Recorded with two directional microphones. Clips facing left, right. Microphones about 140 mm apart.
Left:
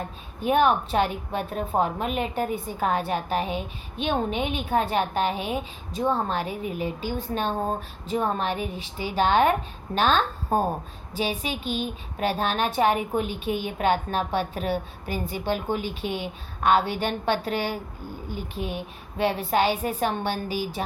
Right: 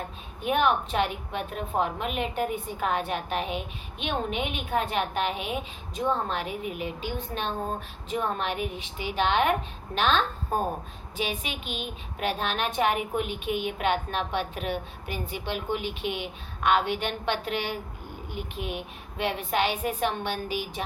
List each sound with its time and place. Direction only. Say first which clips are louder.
0.4 s a woman's voice: left 3 dB; 35° left (ahead or behind)